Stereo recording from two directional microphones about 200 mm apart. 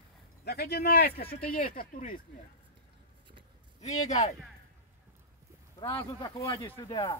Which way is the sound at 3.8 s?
35° left (ahead or behind).